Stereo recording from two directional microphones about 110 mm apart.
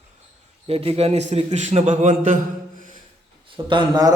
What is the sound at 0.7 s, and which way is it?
A man's voice, 60° right (ahead or behind).